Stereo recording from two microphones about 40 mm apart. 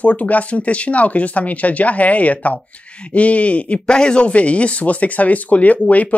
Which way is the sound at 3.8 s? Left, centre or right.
Left.